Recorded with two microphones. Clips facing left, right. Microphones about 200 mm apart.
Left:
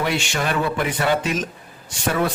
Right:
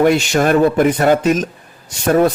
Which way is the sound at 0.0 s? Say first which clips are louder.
Right 10 dB; 45° right (ahead or behind).